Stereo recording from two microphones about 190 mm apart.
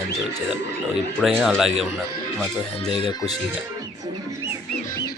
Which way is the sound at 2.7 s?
30° left (ahead or behind).